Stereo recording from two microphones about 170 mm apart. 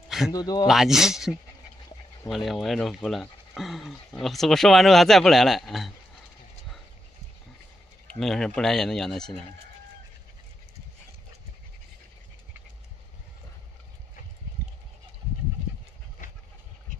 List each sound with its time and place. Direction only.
0.3 s speech: 25° left (ahead or behind)
0.7 s speech: centre (ahead or behind)
8.1 s speech: centre (ahead or behind)